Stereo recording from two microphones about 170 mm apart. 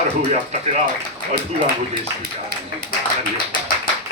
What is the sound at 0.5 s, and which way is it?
Speech, 40° right (ahead or behind).